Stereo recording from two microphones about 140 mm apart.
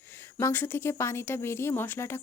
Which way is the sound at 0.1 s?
20° left (ahead or behind).